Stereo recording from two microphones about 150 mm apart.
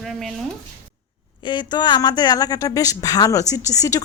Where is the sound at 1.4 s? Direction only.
30° left (ahead or behind).